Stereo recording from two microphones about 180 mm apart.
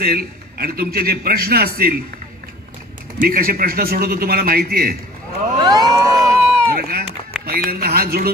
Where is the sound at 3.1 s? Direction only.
55° right (ahead or behind).